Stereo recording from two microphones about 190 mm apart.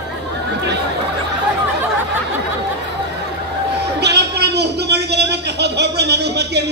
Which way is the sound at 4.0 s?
60° right (ahead or behind).